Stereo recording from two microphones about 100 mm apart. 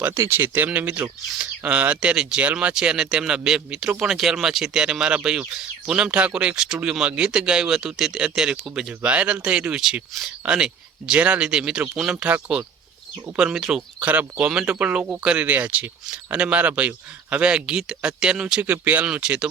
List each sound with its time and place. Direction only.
0.0 s speech: 20° right (ahead or behind)